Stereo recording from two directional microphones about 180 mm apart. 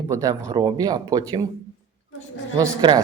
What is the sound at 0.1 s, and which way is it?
Speech, 20° right (ahead or behind).